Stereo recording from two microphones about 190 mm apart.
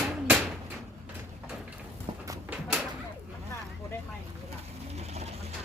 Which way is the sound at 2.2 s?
10° right (ahead or behind).